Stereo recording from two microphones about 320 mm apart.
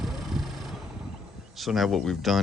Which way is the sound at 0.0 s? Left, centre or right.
Centre.